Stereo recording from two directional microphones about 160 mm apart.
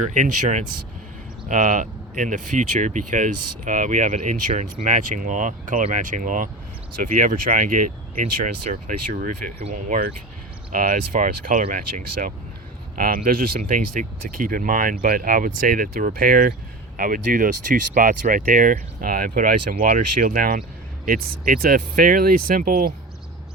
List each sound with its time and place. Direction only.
0.0 s speech: 50° right (ahead or behind); by 22.9 s 65° right (ahead or behind)